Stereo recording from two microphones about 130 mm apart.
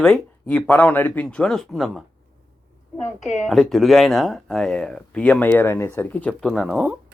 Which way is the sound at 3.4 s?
Centre (ahead or behind).